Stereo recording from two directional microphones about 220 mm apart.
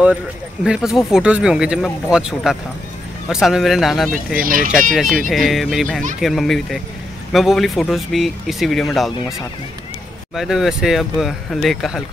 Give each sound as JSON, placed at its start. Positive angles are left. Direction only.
{"t": 0.7, "sound": "speech", "side_deg": -5}
{"t": 4.4, "sound": "speech", "side_deg": -40}
{"t": 4.9, "sound": "speech", "side_deg": 0}
{"t": 10.3, "sound": "speech", "side_deg": 0}